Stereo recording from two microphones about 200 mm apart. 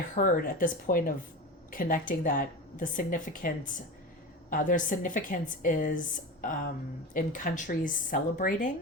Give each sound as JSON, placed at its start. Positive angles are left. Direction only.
{"t": 0.2, "sound": "a woman's voice", "side_deg": 45}